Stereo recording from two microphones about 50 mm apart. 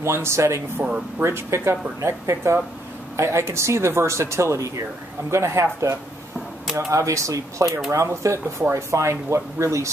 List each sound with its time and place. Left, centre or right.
0.0 s speech: right
0.8 s speech: right
1.2 s speech: right
5.3 s speech: right
8.7 s speech: right